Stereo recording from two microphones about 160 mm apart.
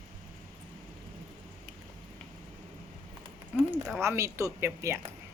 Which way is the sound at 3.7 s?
15° right (ahead or behind).